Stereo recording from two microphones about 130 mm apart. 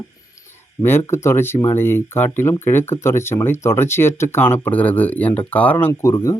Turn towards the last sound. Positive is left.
turn(degrees=15)  # may be behind; listen again after turning